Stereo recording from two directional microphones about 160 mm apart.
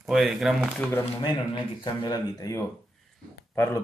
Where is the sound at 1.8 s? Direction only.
25° left (ahead or behind).